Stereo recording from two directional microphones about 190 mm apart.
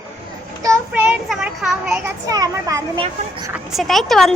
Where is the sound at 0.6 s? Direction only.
15° right (ahead or behind).